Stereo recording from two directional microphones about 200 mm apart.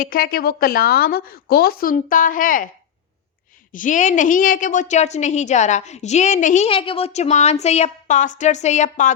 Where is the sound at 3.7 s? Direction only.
40° left (ahead or behind).